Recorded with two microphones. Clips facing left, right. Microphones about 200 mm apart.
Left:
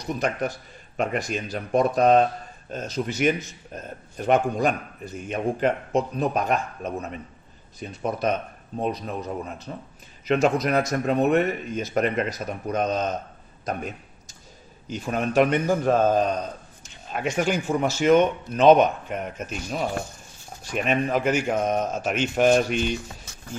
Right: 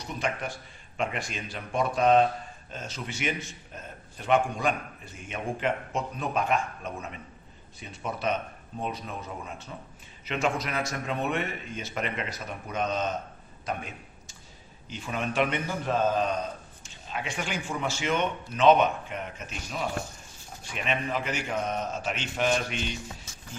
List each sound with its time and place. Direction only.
0.0 s a man's voice: 40° left (ahead or behind)
13.7 s a sound: 40° left (ahead or behind)
14.9 s speech: 45° left (ahead or behind)
20.6 s speech: 45° left (ahead or behind)